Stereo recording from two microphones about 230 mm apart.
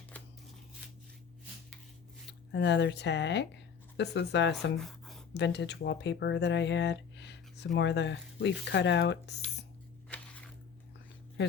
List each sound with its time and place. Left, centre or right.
2.5 s speech: left
4.8 s a sound: centre
5.3 s speech: left